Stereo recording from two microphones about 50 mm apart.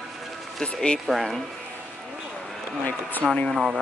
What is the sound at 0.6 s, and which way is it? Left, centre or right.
Speech, centre.